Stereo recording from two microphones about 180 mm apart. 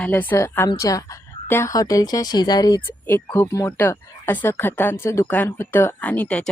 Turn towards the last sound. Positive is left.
turn(degrees=10)  # may be behind; listen again after turning